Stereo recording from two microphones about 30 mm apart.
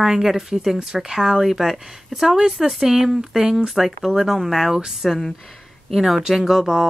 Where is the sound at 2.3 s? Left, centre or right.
Centre.